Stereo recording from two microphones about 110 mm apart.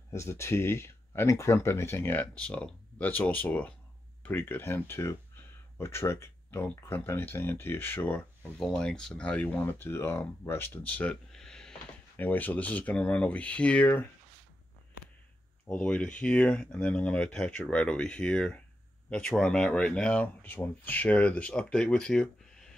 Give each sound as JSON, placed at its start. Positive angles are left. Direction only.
{"t": 0.1, "sound": "speech", "side_deg": 25}
{"t": 8.5, "sound": "speech", "side_deg": 5}
{"t": 12.2, "sound": "speech", "side_deg": 15}
{"t": 15.6, "sound": "speech", "side_deg": 10}